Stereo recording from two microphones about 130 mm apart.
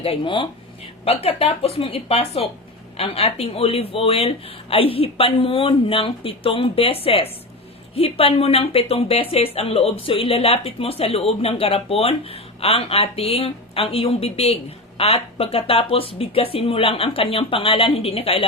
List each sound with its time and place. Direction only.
0.0 s a woman's voice: 45° left (ahead or behind)